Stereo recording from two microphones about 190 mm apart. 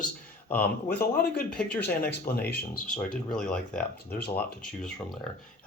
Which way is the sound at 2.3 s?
50° left (ahead or behind).